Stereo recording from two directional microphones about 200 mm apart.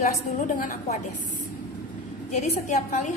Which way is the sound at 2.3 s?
35° left (ahead or behind).